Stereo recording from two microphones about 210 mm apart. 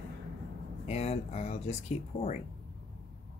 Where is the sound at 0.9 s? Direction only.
30° left (ahead or behind).